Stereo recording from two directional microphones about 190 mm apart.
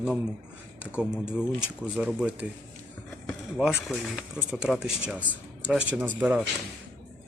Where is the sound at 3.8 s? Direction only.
Centre (ahead or behind).